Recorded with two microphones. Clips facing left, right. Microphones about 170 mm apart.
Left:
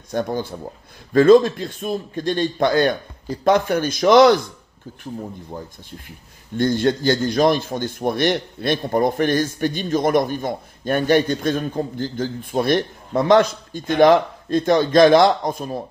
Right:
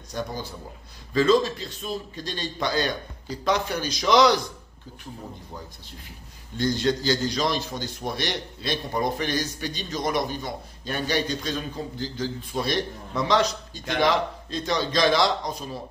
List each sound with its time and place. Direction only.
0.1 s a man's voice: 55° left (ahead or behind)
5.5 s a man's voice: 50° left (ahead or behind)